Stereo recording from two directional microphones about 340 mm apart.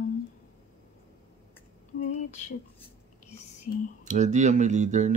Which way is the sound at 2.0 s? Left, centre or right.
Left.